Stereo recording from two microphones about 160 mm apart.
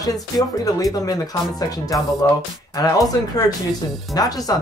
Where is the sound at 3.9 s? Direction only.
Centre (ahead or behind).